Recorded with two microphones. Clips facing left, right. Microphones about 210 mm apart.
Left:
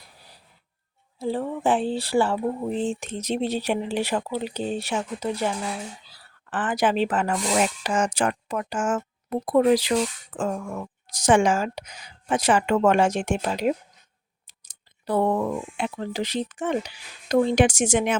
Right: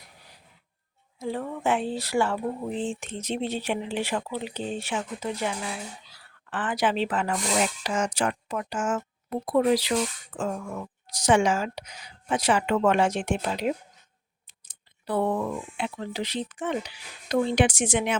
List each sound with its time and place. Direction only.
1.2 s speech: 30° left (ahead or behind)